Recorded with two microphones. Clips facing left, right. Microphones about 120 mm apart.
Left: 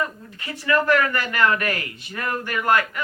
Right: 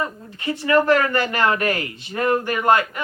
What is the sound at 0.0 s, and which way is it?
Speech, 25° right (ahead or behind).